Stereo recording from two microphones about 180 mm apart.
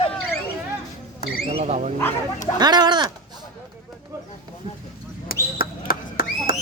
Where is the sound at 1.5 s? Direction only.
35° right (ahead or behind).